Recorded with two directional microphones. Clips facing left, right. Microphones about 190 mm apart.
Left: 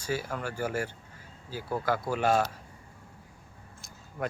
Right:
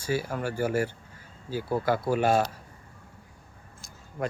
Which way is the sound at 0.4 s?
10° right (ahead or behind).